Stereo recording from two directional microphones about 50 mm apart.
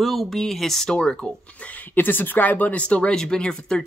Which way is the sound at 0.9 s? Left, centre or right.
Centre.